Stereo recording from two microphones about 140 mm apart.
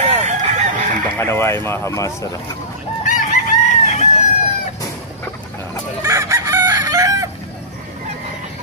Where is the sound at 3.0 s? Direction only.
65° left (ahead or behind).